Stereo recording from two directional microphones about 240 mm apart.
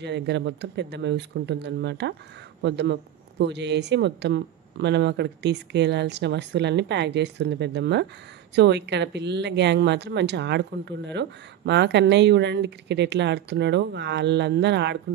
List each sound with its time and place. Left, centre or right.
0.0 s a woman's voice: right